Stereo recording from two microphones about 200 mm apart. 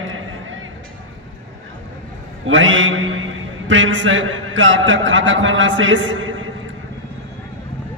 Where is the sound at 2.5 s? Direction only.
70° right (ahead or behind).